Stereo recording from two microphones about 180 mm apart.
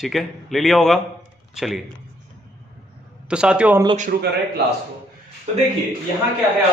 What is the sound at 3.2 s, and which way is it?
Speech, 5° right (ahead or behind).